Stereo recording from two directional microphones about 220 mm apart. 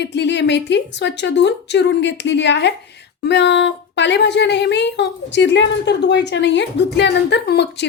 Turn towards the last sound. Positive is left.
turn(degrees=50)  # may be behind; listen again after turning